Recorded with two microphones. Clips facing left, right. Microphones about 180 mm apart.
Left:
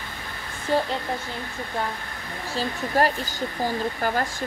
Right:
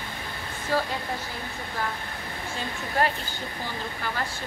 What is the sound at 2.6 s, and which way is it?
Speech, 40° left (ahead or behind).